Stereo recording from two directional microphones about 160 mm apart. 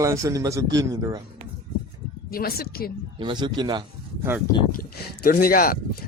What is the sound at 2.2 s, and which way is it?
Speech, 70° left (ahead or behind).